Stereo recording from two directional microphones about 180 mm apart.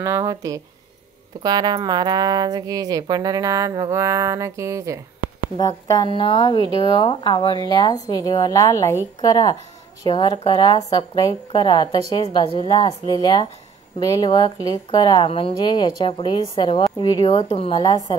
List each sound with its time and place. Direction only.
0.0 s speech: 15° right (ahead or behind)
5.6 s a woman's voice: 20° left (ahead or behind)